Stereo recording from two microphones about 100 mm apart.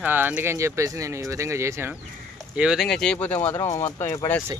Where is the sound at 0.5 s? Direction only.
30° right (ahead or behind).